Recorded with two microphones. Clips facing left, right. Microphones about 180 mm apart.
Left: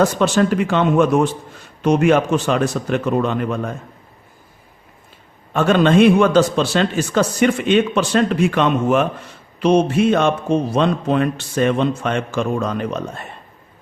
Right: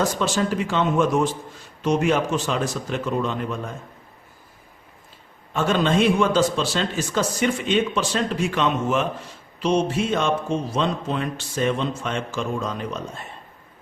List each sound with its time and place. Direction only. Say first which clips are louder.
0.0 s speech: left 7 dB; 65° left (ahead or behind)
5.5 s speech: left 7 dB; 65° left (ahead or behind)